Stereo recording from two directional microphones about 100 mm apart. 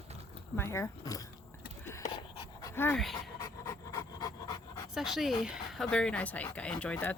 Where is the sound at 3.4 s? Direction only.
30° left (ahead or behind).